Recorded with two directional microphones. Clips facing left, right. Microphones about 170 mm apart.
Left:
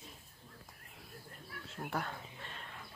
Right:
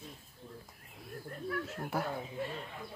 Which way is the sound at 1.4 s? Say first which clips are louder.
Right 17 dB; 60° right (ahead or behind).